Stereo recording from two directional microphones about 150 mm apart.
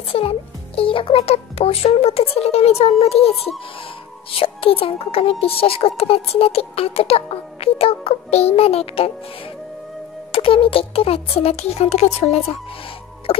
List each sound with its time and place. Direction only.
0.1 s speech: 40° left (ahead or behind)
10.3 s speech: 40° left (ahead or behind)